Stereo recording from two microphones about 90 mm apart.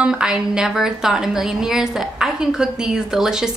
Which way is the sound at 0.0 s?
10° right (ahead or behind).